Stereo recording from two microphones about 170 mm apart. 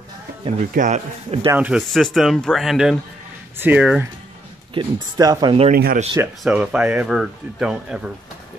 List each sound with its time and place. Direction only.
0.7 s speech: 45° right (ahead or behind)
1.5 s speech: 10° right (ahead or behind)
4.7 s speech: 25° right (ahead or behind)
5.7 s speech: 60° right (ahead or behind)
6.4 s speech: 5° right (ahead or behind)